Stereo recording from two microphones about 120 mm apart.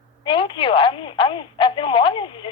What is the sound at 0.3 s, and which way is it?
Speech, 45° left (ahead or behind).